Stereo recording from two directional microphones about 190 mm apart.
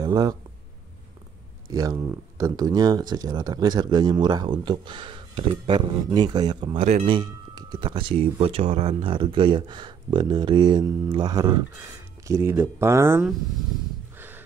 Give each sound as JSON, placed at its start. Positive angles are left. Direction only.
{"t": 0.0, "sound": "speech", "side_deg": -20}
{"t": 1.7, "sound": "speech", "side_deg": -20}
{"t": 14.1, "sound": "a sound", "side_deg": -10}